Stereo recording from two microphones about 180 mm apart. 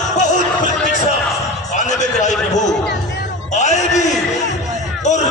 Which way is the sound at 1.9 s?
40° left (ahead or behind).